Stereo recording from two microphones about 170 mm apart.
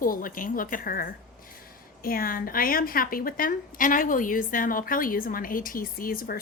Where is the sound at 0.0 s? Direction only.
55° left (ahead or behind).